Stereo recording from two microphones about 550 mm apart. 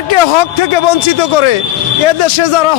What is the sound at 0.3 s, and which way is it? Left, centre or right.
A man's voice, left.